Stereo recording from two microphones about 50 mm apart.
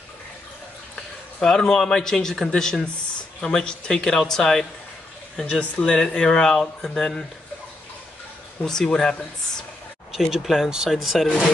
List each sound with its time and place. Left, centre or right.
1.4 s speech: centre
5.4 s speech: left
8.6 s speech: centre
10.3 s speech: centre